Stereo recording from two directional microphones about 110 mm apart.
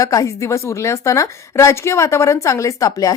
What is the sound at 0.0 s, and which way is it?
A woman's voice, 30° left (ahead or behind).